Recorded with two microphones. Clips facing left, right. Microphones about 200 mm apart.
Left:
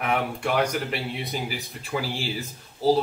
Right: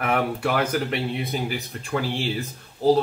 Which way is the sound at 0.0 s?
Centre (ahead or behind).